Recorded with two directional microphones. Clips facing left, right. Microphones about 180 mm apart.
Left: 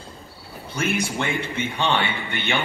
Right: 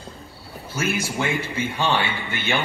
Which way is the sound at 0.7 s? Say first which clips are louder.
Left 1 dB; 5° right (ahead or behind).